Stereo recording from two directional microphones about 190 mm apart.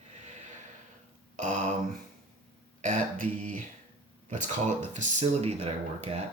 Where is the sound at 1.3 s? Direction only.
40° right (ahead or behind).